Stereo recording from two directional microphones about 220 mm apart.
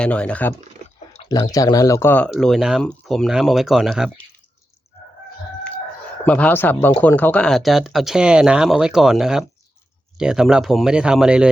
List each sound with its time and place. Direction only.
0.0 s speech: 5° left (ahead or behind)
0.9 s chewing: 30° left (ahead or behind)
1.3 s speech: 15° left (ahead or behind); by 4.3 s centre (ahead or behind)
6.2 s speech: 5° left (ahead or behind)